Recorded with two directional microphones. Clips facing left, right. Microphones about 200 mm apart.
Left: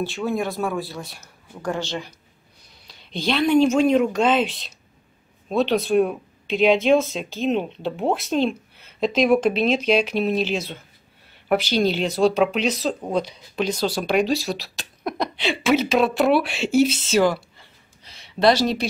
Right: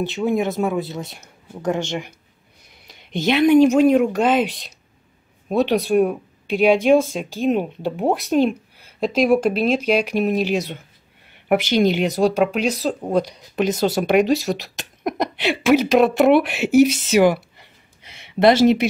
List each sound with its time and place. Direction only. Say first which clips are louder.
0.0 s speech: right 4 dB; 20° right (ahead or behind)
3.3 s speech: right 4 dB; 15° right (ahead or behind)
13.7 s speech: right 4 dB; 20° right (ahead or behind)
14.5 s a sound: right 4 dB; 20° right (ahead or behind)
15.7 s speech: right 4 dB; 15° right (ahead or behind)